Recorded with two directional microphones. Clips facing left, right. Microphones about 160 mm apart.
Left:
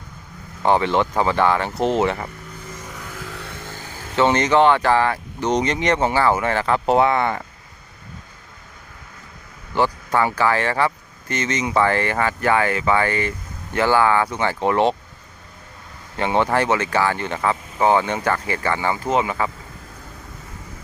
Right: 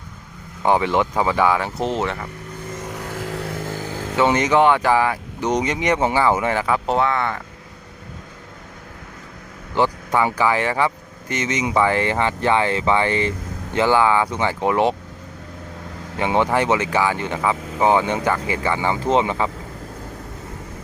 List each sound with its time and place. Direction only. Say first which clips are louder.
0.6 s speech: even; 10° right (ahead or behind); by 2.2 s 10° left (ahead or behind)
3.0 s vehicle: right 6 dB; 35° right (ahead or behind)
4.1 s speech: even; 10° right (ahead or behind)
6.8 s speech: left 3 dB; 15° left (ahead or behind)
9.7 s speech: even; 15° right (ahead or behind)
16.1 s speech: even; 15° right (ahead or behind)